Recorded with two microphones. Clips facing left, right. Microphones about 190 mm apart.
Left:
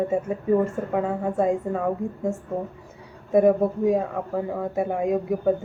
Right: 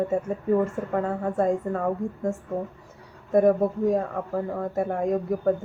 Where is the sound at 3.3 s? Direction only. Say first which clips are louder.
Left 1 dB; 5° left (ahead or behind).